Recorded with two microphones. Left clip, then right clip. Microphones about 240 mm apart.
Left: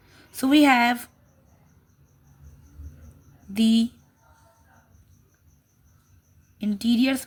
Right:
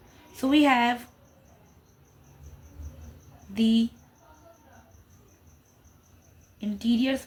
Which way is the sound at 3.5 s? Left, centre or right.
Left.